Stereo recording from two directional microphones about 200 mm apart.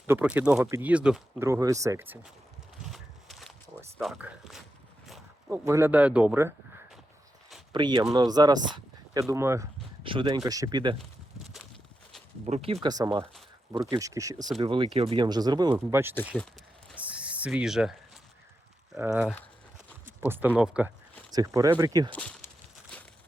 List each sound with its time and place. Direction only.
0.1 s speech: 10° right (ahead or behind)
2.9 s a sound: centre (ahead or behind)
4.0 s speech: centre (ahead or behind)
5.5 s speech: 15° right (ahead or behind)
7.7 s speech: 20° right (ahead or behind)
10.0 s speech: 25° right (ahead or behind)
12.5 s speech: 30° right (ahead or behind); by 16.1 s 15° right (ahead or behind)
16.3 s speech: centre (ahead or behind)
17.0 s a sound: 5° right (ahead or behind)
18.9 s speech: 10° right (ahead or behind)
20.1 s a sound: 10° right (ahead or behind)
20.6 s speech: 5° right (ahead or behind)
22.1 s speech: 10° left (ahead or behind)